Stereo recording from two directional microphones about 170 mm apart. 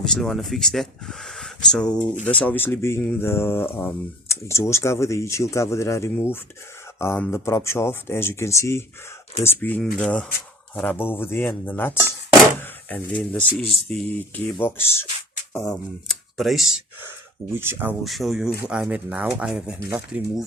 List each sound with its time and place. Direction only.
0.0 s speech: centre (ahead or behind)
12.5 s drawer open or close: 10° left (ahead or behind)
13.7 s speech: centre (ahead or behind)
18.0 s speech: centre (ahead or behind)